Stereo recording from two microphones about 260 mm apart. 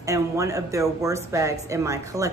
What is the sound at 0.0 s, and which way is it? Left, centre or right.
A woman's voice, centre.